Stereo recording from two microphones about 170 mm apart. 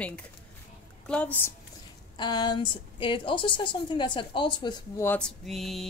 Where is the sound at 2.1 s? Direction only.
25° left (ahead or behind).